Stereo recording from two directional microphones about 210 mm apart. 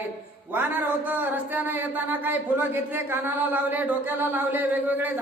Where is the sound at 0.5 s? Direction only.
10° right (ahead or behind).